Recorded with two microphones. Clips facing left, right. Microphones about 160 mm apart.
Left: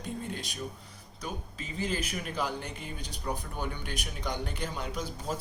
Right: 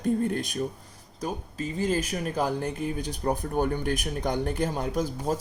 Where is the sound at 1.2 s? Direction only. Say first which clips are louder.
Right 8 dB; 40° right (ahead or behind).